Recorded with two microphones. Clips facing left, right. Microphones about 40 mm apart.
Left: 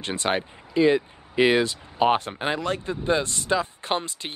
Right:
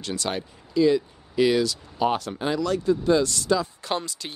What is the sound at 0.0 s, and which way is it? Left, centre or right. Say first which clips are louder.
Speech: left 3 dB; left.